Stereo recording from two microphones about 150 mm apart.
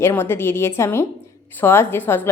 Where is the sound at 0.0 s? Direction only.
15° left (ahead or behind).